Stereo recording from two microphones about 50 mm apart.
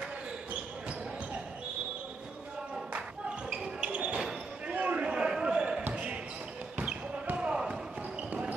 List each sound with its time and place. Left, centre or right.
2.9 s basketball bounce: right
7.3 s basketball bounce: right